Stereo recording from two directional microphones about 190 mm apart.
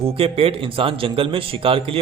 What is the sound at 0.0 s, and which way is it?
Speech, 30° right (ahead or behind).